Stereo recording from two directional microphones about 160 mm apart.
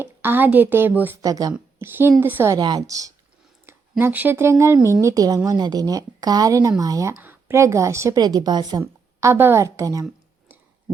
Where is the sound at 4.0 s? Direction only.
10° right (ahead or behind).